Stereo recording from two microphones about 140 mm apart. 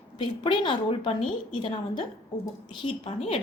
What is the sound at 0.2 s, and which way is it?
A woman's voice, 35° left (ahead or behind).